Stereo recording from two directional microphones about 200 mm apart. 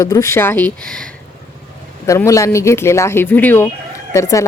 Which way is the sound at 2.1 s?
15° left (ahead or behind).